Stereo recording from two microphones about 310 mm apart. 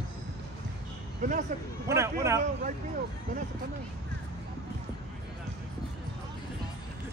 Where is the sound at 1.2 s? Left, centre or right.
Right.